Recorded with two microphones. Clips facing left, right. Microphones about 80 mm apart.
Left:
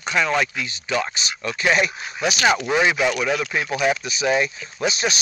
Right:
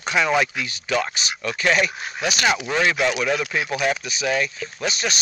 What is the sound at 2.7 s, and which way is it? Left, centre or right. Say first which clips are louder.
Speech: left 2 dB; centre.